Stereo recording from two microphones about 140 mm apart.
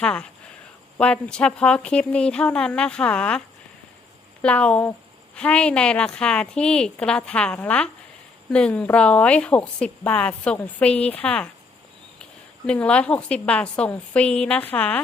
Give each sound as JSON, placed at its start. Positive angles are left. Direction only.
{"t": 0.0, "sound": "a woman's voice", "side_deg": 5}
{"t": 4.4, "sound": "a woman's voice", "side_deg": 10}